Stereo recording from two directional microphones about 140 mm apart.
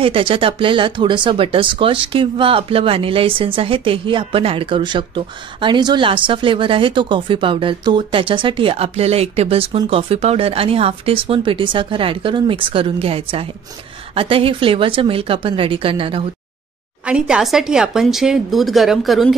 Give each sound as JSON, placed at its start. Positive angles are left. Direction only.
{"t": 0.0, "sound": "speech", "side_deg": -40}
{"t": 17.0, "sound": "speech", "side_deg": -5}